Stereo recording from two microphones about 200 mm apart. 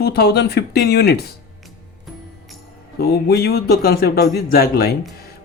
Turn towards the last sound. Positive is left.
turn(degrees=50)  # may be behind; listen again after turning